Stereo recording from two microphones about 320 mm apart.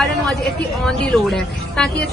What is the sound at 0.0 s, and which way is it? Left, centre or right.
Speech, centre.